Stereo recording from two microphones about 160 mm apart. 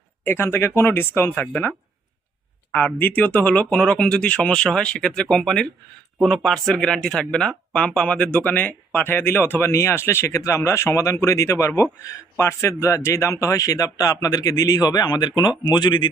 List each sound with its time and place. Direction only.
0.3 s speech: 15° left (ahead or behind)
2.7 s speech: 10° left (ahead or behind); by 16.0 s 25° left (ahead or behind)